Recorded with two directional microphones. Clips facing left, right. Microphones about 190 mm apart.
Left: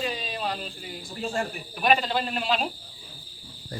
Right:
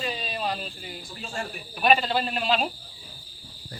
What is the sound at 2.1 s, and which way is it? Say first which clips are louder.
Speech: right 1 dB; 10° right (ahead or behind).